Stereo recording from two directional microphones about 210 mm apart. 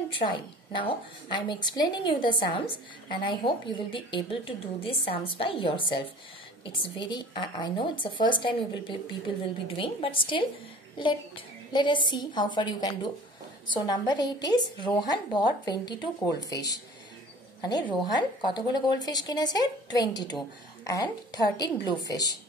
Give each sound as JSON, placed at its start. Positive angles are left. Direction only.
{"t": 0.2, "sound": "a woman's voice", "side_deg": 20}